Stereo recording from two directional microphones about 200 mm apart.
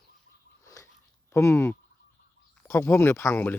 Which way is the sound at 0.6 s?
15° left (ahead or behind).